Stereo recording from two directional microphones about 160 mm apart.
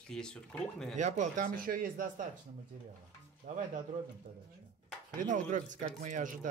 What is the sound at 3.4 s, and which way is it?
Speech, 60° right (ahead or behind).